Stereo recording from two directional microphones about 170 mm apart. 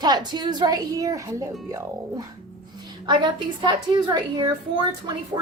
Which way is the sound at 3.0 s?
25° right (ahead or behind).